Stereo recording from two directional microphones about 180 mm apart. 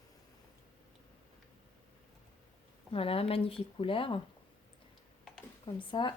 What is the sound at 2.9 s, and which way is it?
A woman's voice, 30° left (ahead or behind).